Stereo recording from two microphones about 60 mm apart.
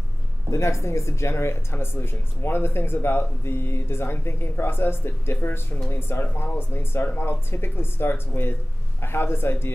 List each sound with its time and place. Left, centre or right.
0.5 s speech: left